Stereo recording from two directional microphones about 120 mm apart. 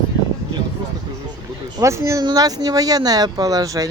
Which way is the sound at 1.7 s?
25° right (ahead or behind).